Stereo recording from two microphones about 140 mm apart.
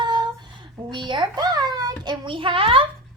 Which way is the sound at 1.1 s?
30° right (ahead or behind).